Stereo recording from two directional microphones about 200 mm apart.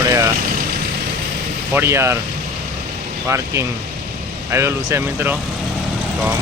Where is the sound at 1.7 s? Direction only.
10° right (ahead or behind).